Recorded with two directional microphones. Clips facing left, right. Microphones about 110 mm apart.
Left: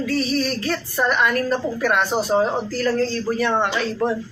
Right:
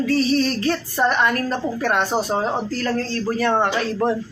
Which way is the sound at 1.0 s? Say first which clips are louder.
Even; 30° right (ahead or behind).